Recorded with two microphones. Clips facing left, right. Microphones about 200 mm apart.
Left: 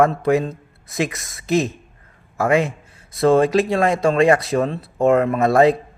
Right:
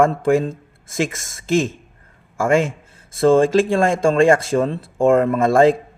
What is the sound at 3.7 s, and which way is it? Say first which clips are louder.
A man's voice: right 1 dB; 50° right (ahead or behind).